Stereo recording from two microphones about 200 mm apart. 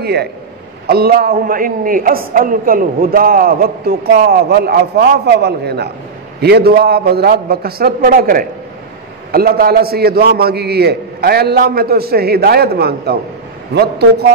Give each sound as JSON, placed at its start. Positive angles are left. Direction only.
{"t": 0.0, "sound": "a man's voice", "side_deg": -55}